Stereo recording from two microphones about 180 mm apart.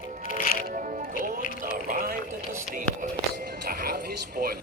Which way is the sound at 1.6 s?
50° right (ahead or behind).